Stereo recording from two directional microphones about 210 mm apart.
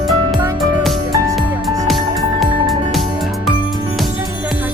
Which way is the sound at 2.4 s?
Centre (ahead or behind).